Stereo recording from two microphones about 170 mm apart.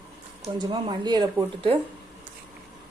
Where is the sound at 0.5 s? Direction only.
25° right (ahead or behind).